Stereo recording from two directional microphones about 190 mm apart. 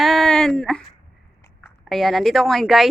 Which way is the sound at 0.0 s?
Centre (ahead or behind).